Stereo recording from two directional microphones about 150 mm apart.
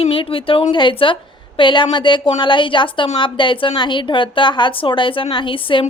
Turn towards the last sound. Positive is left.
turn(degrees=35)  # may be behind; listen again after turning